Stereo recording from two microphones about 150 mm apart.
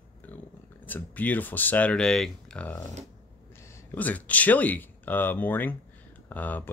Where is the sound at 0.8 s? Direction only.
10° left (ahead or behind).